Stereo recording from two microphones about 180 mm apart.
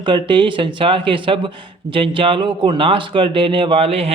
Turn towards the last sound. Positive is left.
turn(degrees=-30)  # may be behind; listen again after turning